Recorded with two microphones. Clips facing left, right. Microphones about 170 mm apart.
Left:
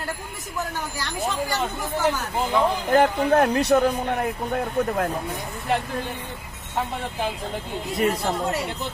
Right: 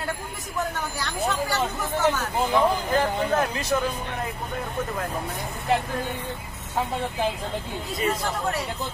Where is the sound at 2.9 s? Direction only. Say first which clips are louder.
Left 5 dB; 65° left (ahead or behind).